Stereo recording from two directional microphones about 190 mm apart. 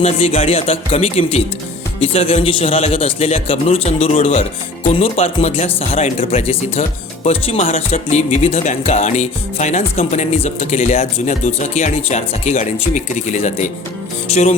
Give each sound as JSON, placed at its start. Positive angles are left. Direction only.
{"t": 0.0, "sound": "speech", "side_deg": 30}